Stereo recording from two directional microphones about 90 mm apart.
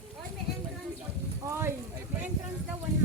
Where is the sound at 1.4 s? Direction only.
30° right (ahead or behind).